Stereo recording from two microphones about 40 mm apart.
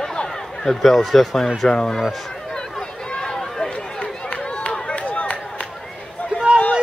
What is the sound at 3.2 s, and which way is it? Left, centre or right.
Run, centre.